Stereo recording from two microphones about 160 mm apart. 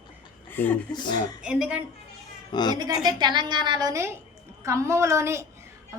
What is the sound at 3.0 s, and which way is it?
A woman's voice, 30° right (ahead or behind).